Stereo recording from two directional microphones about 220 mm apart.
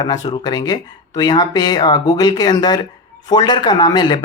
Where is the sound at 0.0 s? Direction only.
20° left (ahead or behind).